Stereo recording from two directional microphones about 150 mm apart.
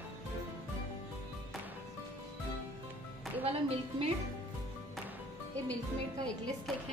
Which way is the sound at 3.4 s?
40° right (ahead or behind).